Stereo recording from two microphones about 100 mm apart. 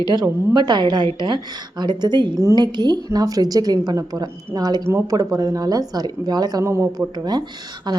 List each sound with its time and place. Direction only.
0.1 s a woman's voice: 45° right (ahead or behind)
4.9 s speech: 30° right (ahead or behind)
7.2 s a woman's voice: 45° right (ahead or behind)